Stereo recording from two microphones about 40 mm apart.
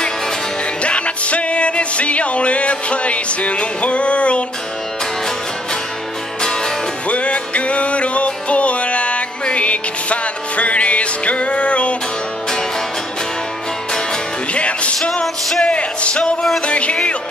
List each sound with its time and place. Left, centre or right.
0.8 s music: left
7.1 s music: left
14.5 s music: left